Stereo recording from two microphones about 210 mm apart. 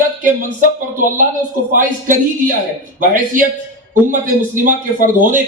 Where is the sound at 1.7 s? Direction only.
40° right (ahead or behind).